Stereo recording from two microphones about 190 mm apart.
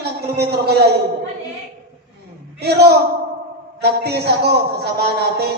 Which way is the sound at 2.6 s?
60° right (ahead or behind).